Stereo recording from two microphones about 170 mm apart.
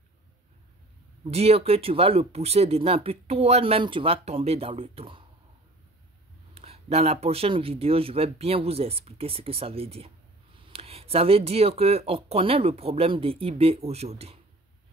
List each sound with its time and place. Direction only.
1.2 s speech: 35° right (ahead or behind)
6.5 s speech: 35° right (ahead or behind)